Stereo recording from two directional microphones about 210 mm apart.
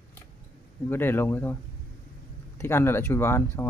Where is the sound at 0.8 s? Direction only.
10° left (ahead or behind).